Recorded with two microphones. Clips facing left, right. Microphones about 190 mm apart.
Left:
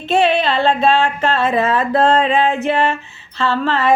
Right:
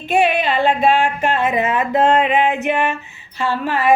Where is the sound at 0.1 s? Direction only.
15° right (ahead or behind).